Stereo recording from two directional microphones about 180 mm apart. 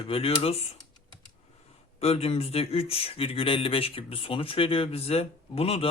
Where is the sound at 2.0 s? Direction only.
35° left (ahead or behind).